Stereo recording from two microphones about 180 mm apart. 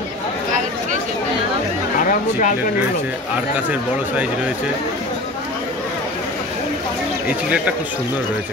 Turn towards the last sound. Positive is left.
turn(degrees=-5)  # may be behind; listen again after turning